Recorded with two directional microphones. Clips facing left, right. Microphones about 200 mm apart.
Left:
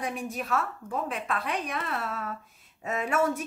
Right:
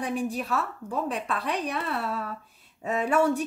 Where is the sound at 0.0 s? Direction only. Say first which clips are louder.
Right 4 dB; 35° right (ahead or behind).